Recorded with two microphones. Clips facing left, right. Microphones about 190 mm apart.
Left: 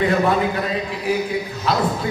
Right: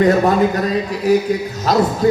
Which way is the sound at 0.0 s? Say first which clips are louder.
Right 5 dB; 40° right (ahead or behind).